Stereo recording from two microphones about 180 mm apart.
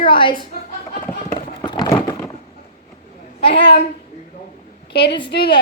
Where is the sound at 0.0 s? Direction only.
30° left (ahead or behind).